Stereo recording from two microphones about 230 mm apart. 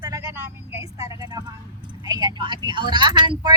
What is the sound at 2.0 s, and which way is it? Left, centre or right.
Speech, centre.